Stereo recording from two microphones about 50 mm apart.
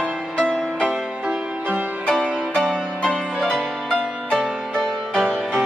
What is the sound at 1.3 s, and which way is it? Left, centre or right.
Music, right.